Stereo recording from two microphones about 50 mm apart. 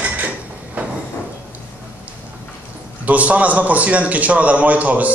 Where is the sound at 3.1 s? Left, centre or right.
Right.